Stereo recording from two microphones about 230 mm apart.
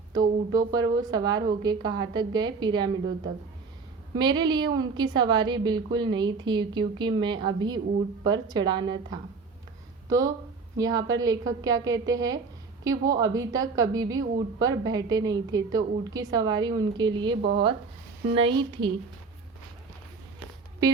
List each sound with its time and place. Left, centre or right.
0.1 s a woman's voice: centre
4.1 s a woman's voice: centre
18.3 s a woman's voice: right